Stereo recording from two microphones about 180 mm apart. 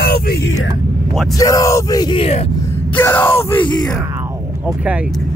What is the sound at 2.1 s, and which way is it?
Speech, 35° left (ahead or behind).